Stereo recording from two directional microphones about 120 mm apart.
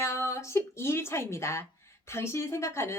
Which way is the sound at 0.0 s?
25° left (ahead or behind).